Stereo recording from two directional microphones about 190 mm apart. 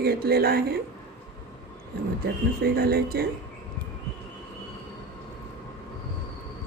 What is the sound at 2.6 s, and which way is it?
Speech, 55° right (ahead or behind).